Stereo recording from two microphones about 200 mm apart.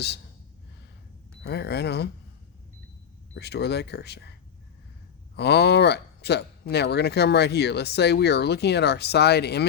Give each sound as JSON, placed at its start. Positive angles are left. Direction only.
{"t": 1.5, "sound": "speech", "side_deg": 55}
{"t": 3.3, "sound": "speech", "side_deg": 55}
{"t": 5.4, "sound": "speech", "side_deg": 55}